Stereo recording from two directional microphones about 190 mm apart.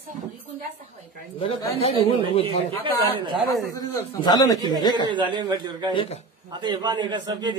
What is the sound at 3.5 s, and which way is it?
Speech, 20° left (ahead or behind).